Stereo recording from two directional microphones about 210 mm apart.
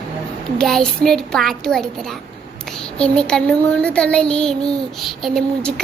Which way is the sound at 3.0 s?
5° left (ahead or behind).